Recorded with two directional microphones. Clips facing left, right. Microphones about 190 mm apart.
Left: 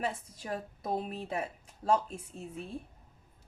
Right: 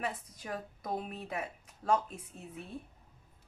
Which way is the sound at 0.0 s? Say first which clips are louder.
Left 3 dB; 30° left (ahead or behind).